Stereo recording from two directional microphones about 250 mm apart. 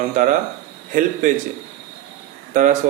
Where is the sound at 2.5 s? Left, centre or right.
Right.